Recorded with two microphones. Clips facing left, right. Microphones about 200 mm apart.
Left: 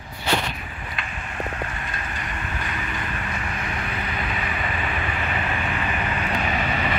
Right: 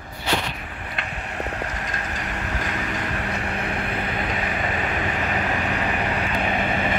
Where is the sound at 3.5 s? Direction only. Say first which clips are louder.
Right 3 dB; 35° right (ahead or behind).